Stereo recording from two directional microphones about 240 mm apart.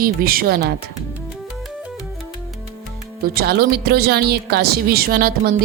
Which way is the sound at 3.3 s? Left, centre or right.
Right.